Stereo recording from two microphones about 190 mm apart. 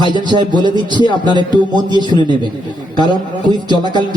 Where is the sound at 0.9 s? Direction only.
25° left (ahead or behind).